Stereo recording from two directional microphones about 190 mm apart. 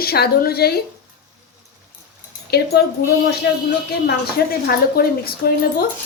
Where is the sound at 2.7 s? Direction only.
55° left (ahead or behind).